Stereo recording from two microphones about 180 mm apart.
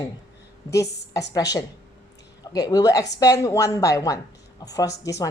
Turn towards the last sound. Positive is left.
turn(degrees=20)  # may be behind; listen again after turning